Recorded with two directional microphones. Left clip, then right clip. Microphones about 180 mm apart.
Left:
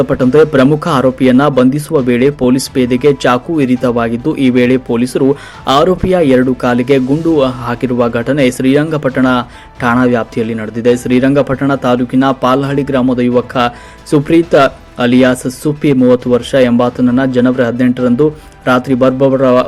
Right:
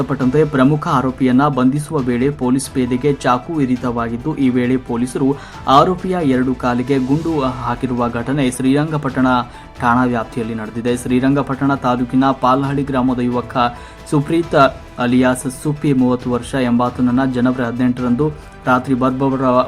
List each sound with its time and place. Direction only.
0.0 s speech: 15° left (ahead or behind)